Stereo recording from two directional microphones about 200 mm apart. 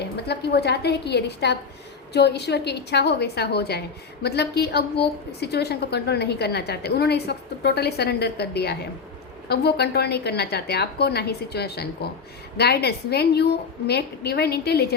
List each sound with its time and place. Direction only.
0.0 s a woman's voice: 55° left (ahead or behind)